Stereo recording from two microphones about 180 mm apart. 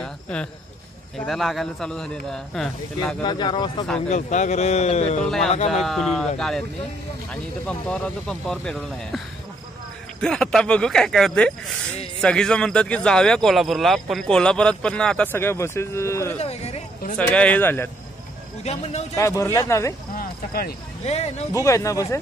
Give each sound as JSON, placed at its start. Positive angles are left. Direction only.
{"t": 0.0, "sound": "a sound", "side_deg": 5}
{"t": 1.2, "sound": "speech", "side_deg": 0}
{"t": 3.3, "sound": "speech", "side_deg": 25}
{"t": 4.1, "sound": "speech", "side_deg": 40}
{"t": 5.2, "sound": "speech", "side_deg": 0}
{"t": 7.6, "sound": "speech", "side_deg": 5}
{"t": 10.2, "sound": "speech", "side_deg": 5}
{"t": 16.3, "sound": "a sound", "side_deg": 35}
{"t": 17.3, "sound": "speech", "side_deg": 5}
{"t": 18.6, "sound": "speech", "side_deg": 35}
{"t": 19.1, "sound": "speech", "side_deg": 15}
{"t": 20.2, "sound": "a sound", "side_deg": 55}
{"t": 21.0, "sound": "speech", "side_deg": 35}
{"t": 21.6, "sound": "speech", "side_deg": 15}